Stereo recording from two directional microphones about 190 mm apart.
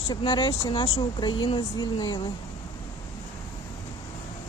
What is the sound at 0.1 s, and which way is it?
Speech, 25° left (ahead or behind).